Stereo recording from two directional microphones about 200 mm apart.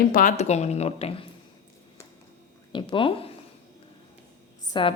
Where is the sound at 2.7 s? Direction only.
25° left (ahead or behind).